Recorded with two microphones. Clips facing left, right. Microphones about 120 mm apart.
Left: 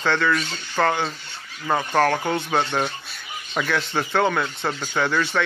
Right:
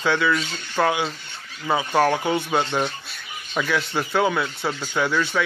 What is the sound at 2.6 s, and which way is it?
Speech, 5° left (ahead or behind).